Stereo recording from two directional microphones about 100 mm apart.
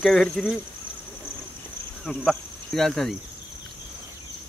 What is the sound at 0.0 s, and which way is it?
Speech, 5° left (ahead or behind).